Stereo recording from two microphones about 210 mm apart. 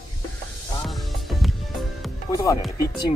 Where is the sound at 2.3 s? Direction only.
15° left (ahead or behind).